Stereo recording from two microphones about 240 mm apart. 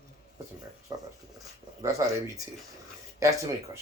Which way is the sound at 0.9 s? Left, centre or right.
Centre.